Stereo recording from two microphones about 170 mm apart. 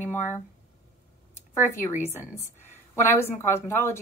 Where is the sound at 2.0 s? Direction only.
15° left (ahead or behind).